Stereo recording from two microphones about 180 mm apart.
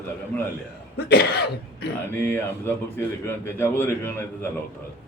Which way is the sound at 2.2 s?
10° left (ahead or behind).